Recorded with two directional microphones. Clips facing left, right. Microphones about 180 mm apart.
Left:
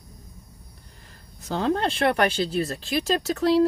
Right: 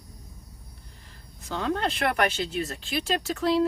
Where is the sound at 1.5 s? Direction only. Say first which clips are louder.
Left 4 dB; 35° left (ahead or behind).